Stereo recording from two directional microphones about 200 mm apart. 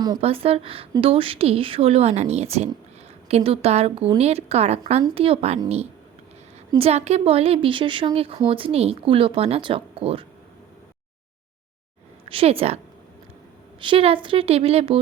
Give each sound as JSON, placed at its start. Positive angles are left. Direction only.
{"t": 0.2, "sound": "a woman's voice", "side_deg": -30}
{"t": 12.3, "sound": "a woman's voice", "side_deg": -30}
{"t": 13.8, "sound": "a woman's voice", "side_deg": -25}